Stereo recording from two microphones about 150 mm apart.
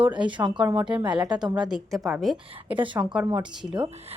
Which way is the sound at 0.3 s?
30° right (ahead or behind).